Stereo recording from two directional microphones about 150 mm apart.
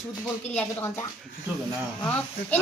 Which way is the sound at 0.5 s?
15° left (ahead or behind).